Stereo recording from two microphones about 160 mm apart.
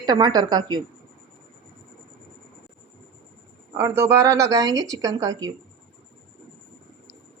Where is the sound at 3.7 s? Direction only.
20° right (ahead or behind).